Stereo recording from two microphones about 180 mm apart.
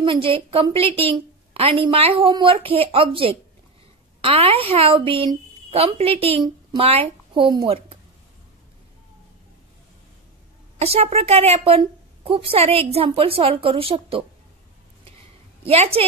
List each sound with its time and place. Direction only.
0.0 s a woman's voice: 30° right (ahead or behind)
10.8 s a woman's voice: 35° right (ahead or behind)
15.6 s a woman's voice: 35° right (ahead or behind)